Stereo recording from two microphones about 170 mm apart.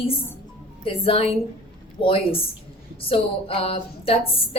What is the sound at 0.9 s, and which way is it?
A woman's voice, 35° left (ahead or behind).